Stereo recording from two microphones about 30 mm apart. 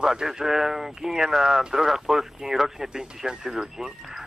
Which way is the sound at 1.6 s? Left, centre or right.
Right.